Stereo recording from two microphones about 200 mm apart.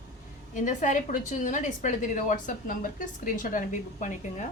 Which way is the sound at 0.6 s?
40° left (ahead or behind).